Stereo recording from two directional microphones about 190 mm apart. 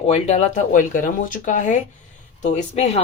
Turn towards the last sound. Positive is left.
turn(degrees=35)  # may be behind; listen again after turning